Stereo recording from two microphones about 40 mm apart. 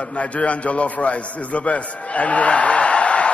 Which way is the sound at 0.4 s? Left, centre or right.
Left.